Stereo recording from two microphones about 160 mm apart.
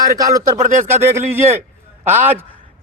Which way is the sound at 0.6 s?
50° right (ahead or behind).